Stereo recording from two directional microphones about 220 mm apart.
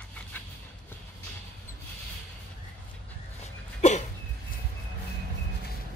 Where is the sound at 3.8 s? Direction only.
30° left (ahead or behind).